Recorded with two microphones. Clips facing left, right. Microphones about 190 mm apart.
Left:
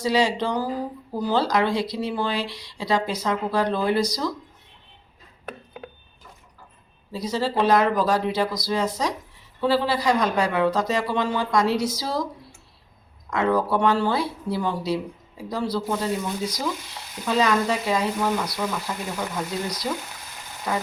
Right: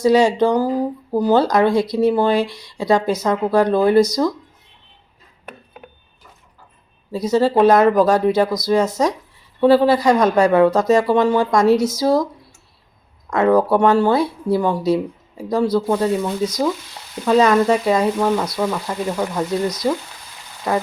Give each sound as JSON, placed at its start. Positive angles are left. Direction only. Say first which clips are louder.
{"t": 0.0, "sound": "speech", "louder": "right 8 dB", "side_deg": -50}
{"t": 7.1, "sound": "speech", "louder": "right 9 dB", "side_deg": -45}
{"t": 13.3, "sound": "speech", "louder": "right 7 dB", "side_deg": -50}
{"t": 19.9, "sound": "speech", "louder": "right 8 dB", "side_deg": -45}